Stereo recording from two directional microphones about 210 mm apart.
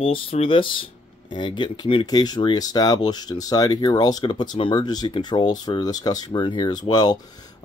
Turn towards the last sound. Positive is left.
turn(degrees=20)  # may be behind; listen again after turning